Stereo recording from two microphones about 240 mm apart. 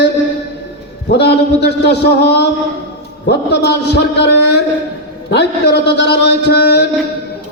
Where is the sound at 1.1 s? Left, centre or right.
Left.